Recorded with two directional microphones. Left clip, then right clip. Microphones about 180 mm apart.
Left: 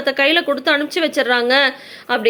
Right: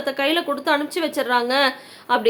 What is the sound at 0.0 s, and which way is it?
A woman's voice, 15° left (ahead or behind).